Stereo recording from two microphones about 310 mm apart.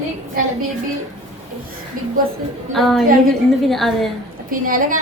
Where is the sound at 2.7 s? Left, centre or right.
Centre.